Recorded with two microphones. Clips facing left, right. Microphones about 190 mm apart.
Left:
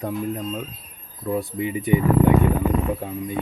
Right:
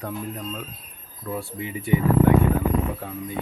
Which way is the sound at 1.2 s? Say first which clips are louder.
Left 6 dB; 15° left (ahead or behind).